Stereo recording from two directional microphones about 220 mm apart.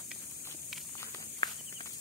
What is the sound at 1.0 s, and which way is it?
Walk, 20° left (ahead or behind).